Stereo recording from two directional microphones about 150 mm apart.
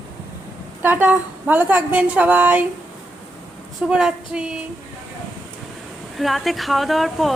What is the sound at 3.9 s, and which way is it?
Speech, 5° right (ahead or behind).